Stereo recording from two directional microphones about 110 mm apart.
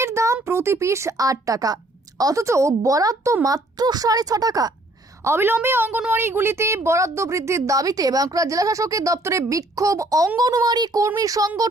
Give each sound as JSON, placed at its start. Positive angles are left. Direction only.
{"t": 0.0, "sound": "a sound", "side_deg": -25}
{"t": 0.4, "sound": "a woman's voice", "side_deg": -25}
{"t": 5.2, "sound": "a woman's voice", "side_deg": -20}